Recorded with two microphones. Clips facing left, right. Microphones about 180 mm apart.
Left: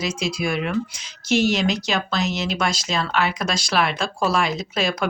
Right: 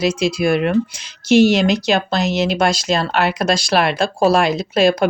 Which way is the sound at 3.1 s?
75° right (ahead or behind).